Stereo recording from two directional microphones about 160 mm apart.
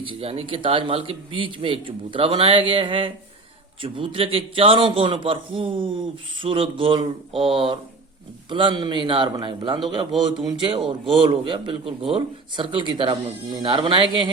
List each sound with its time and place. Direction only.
0.0 s a man's voice: 35° right (ahead or behind)